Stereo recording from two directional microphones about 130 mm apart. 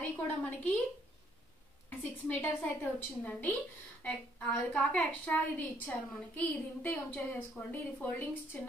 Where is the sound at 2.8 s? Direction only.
10° left (ahead or behind).